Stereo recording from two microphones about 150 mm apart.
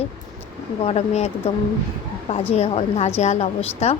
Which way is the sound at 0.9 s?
45° left (ahead or behind).